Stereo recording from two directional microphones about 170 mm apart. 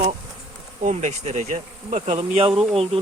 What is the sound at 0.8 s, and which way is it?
Speech, 45° right (ahead or behind).